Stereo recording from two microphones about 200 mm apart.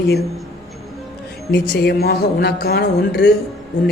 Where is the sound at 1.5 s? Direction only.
60° left (ahead or behind).